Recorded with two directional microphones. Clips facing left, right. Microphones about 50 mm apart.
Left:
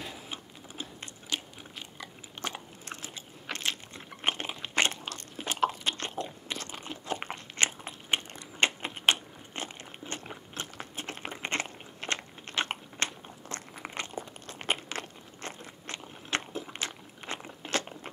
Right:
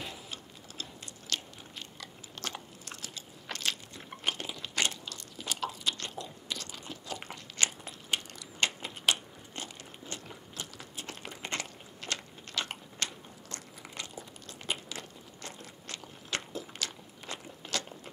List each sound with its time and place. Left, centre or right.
1.2 s biting: centre; by 15.5 s left
15.6 s crunch: left